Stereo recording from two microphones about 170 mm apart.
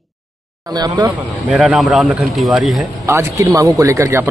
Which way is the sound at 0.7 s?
25° right (ahead or behind).